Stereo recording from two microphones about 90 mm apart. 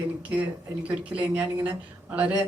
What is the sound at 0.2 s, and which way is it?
A woman's voice, 15° right (ahead or behind).